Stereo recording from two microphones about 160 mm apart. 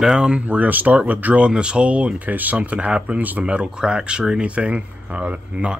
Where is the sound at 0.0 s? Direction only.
5° right (ahead or behind).